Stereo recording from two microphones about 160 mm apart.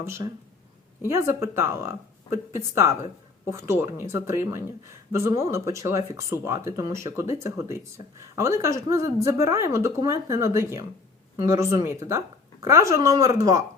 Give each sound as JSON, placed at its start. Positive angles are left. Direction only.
{"t": 0.0, "sound": "a woman's voice", "side_deg": -15}